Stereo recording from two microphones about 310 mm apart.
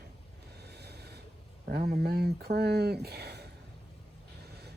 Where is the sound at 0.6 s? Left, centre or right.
Right.